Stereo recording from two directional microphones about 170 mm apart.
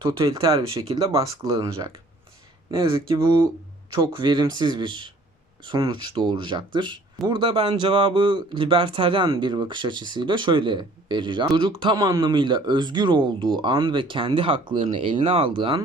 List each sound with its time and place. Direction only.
0.0 s speech: 30° right (ahead or behind)
0.9 s speech: 20° right (ahead or behind)
4.0 s speech: 30° right (ahead or behind)